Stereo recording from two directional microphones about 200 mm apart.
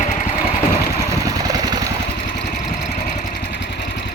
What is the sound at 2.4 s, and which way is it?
Vehicle, 35° left (ahead or behind).